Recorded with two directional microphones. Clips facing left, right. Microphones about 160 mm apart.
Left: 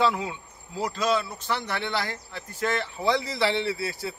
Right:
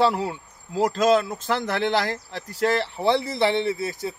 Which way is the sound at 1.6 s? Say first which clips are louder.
Right 7 dB; 90° right.